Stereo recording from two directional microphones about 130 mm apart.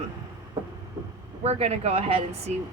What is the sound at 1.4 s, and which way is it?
Speech, 50° right (ahead or behind).